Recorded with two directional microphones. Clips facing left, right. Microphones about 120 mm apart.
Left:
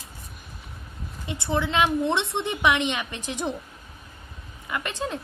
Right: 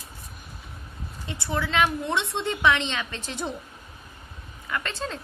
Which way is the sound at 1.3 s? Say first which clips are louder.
Left 2 dB; 20° left (ahead or behind).